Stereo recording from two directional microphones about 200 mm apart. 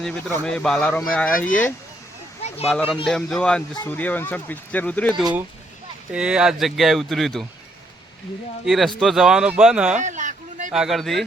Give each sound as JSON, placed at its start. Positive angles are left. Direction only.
{"t": 0.0, "sound": "speech", "side_deg": 0}
{"t": 2.6, "sound": "speech", "side_deg": 5}
{"t": 6.1, "sound": "speech", "side_deg": -5}
{"t": 8.6, "sound": "speech", "side_deg": 0}
{"t": 9.9, "sound": "a sound", "side_deg": -40}
{"t": 10.7, "sound": "speech", "side_deg": 0}